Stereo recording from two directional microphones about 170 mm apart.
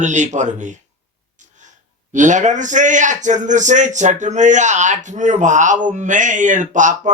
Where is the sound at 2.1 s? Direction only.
45° right (ahead or behind).